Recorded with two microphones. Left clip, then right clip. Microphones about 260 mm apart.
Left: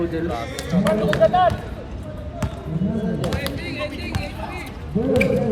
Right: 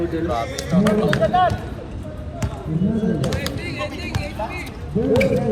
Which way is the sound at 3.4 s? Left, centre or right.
Left.